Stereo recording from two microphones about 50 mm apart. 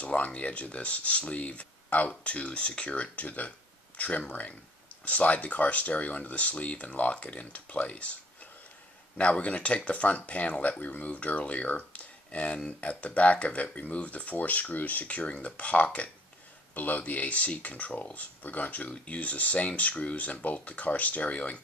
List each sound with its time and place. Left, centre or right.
0.0 s speech: left
9.2 s speech: left